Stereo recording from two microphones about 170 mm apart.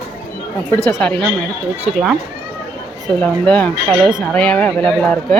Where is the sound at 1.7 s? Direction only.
40° right (ahead or behind).